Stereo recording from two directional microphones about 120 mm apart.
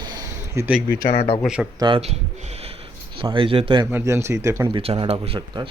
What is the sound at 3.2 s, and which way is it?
Speech, 45° right (ahead or behind).